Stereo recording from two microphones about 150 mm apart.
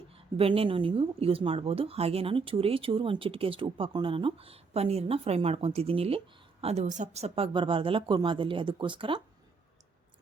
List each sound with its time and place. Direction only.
0.3 s a woman's voice: 40° right (ahead or behind)